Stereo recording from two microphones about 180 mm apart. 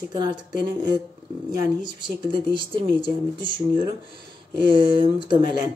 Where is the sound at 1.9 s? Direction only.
25° right (ahead or behind).